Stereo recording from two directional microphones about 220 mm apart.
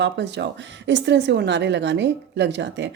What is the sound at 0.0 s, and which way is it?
A woman's voice, 50° right (ahead or behind).